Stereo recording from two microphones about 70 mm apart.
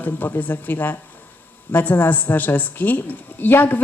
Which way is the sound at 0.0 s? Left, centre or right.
Left.